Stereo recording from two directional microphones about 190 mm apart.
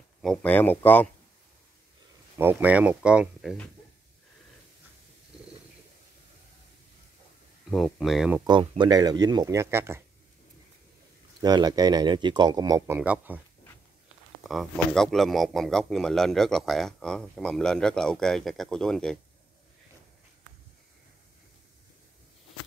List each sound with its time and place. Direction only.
0.2 s speech: 5° left (ahead or behind)
2.3 s speech: 10° right (ahead or behind)
7.7 s speech: centre (ahead or behind)
8.5 s speech: 25° right (ahead or behind)
11.4 s speech: 20° right (ahead or behind)
14.5 s speech: centre (ahead or behind)